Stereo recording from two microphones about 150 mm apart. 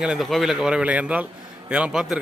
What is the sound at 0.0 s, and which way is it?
A man's voice, 5° right (ahead or behind).